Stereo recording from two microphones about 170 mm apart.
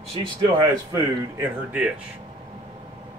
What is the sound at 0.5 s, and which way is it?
Speech, 20° right (ahead or behind).